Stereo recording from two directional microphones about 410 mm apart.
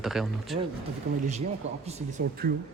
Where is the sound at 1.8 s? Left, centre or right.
Centre.